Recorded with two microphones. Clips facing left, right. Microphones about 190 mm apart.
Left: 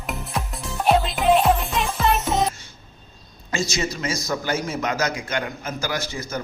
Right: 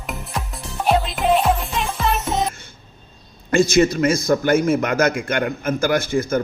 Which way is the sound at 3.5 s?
55° right (ahead or behind).